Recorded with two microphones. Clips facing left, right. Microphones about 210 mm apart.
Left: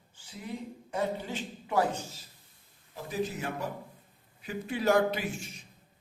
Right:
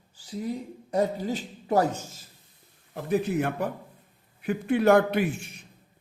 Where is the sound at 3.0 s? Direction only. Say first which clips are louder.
Right 8 dB; 60° right (ahead or behind).